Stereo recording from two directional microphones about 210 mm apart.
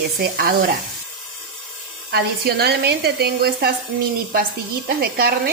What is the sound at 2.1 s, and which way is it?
Speech, 50° right (ahead or behind).